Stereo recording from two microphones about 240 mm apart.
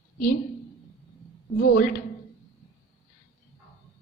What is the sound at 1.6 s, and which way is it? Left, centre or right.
Speech, left.